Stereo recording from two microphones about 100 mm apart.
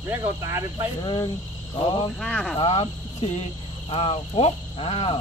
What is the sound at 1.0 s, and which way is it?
Speech, 50° left (ahead or behind).